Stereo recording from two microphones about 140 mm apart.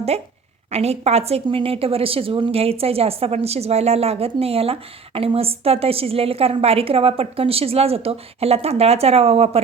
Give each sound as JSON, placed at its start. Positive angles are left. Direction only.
{"t": 0.1, "sound": "a woman's voice", "side_deg": -45}